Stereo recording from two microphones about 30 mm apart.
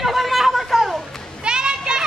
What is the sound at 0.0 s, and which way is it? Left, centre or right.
Chatter, centre.